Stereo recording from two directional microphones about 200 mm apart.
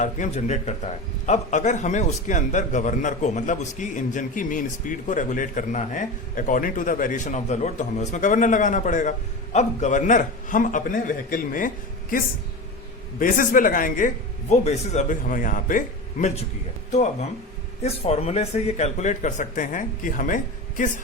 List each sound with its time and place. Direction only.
0.0 s a man's voice: 35° left (ahead or behind)
13.1 s a man's voice: 40° left (ahead or behind)
16.9 s a man's voice: 35° left (ahead or behind)